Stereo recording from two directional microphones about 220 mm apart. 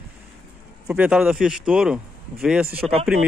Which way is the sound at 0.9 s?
5° right (ahead or behind).